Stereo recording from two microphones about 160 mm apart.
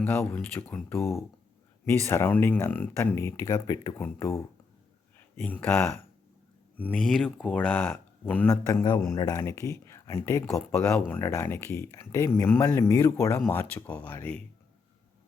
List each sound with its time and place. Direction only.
0.0 s speech: 10° left (ahead or behind)
5.4 s speech: 10° left (ahead or behind)
8.6 s speech: 25° left (ahead or behind)